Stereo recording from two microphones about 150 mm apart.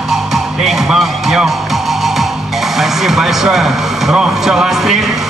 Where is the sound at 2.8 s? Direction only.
Centre (ahead or behind).